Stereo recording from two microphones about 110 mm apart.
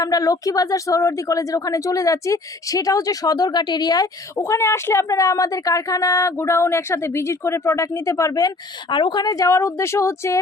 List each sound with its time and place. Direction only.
0.0 s speech: 35° left (ahead or behind)
4.4 s speech: 25° left (ahead or behind)